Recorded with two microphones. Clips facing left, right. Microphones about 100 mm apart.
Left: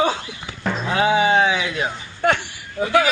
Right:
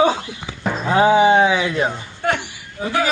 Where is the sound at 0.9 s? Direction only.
35° right (ahead or behind).